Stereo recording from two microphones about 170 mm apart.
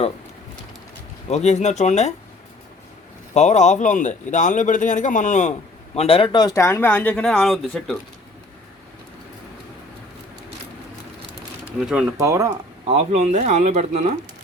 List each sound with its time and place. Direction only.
1.3 s speech: 40° left (ahead or behind)
3.3 s speech: 45° left (ahead or behind); by 7.9 s centre (ahead or behind)
11.8 s speech: 5° right (ahead or behind)
12.1 s speech: 15° right (ahead or behind)
12.9 s speech: 40° right (ahead or behind)